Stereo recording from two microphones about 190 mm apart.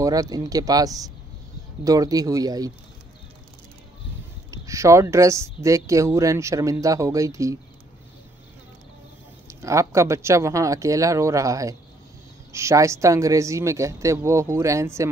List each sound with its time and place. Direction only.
0.0 s speech: 20° right (ahead or behind)
4.5 s speech: 15° right (ahead or behind)
9.5 s speech: 15° right (ahead or behind)